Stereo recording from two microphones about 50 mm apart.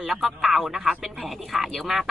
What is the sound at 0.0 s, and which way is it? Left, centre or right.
Speech, centre.